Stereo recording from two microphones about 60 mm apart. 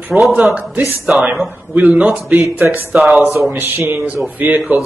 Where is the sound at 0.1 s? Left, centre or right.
Right.